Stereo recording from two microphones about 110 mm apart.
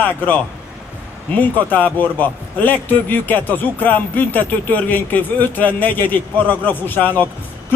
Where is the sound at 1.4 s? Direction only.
15° left (ahead or behind).